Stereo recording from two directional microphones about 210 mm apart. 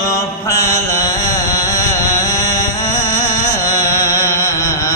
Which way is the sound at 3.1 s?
15° left (ahead or behind).